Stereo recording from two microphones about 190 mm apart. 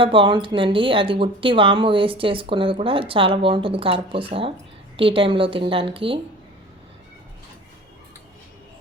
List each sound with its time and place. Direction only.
0.0 s speech: 25° right (ahead or behind)